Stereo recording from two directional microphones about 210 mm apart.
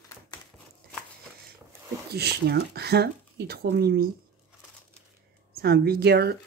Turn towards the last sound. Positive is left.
turn(degrees=-50)  # may be behind; listen again after turning